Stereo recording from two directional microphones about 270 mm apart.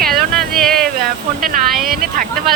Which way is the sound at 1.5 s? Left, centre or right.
Right.